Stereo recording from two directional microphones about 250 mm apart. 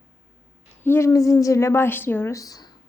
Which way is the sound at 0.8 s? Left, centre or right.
Centre.